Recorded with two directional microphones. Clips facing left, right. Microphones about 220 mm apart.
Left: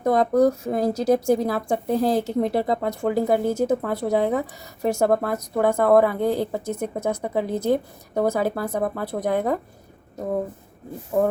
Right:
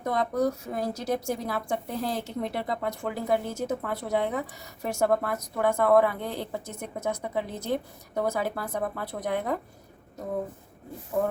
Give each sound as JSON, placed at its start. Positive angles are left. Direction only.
{"t": 0.0, "sound": "a woman's voice", "side_deg": 40}